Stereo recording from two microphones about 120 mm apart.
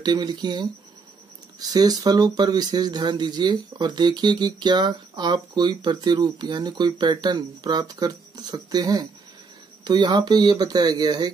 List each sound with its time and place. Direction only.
0.0 s speech: 35° right (ahead or behind)